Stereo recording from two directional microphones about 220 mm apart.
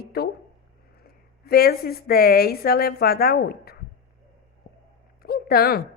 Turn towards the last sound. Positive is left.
turn(degrees=45)  # may be behind; listen again after turning